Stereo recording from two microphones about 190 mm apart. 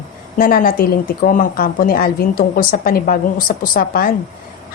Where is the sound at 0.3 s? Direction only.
50° left (ahead or behind).